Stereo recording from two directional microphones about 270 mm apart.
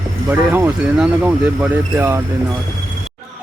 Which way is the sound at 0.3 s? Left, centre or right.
Centre.